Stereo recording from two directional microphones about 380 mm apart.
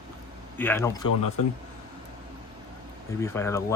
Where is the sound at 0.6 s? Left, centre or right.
Centre.